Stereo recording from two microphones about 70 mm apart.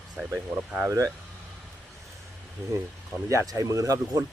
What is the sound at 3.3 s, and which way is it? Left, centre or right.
Speech, right.